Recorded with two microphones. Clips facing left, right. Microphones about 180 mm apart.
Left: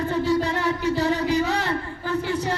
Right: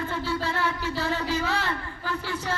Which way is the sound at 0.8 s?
20° left (ahead or behind).